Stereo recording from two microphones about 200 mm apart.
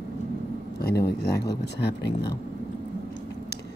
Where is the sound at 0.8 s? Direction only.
50° left (ahead or behind).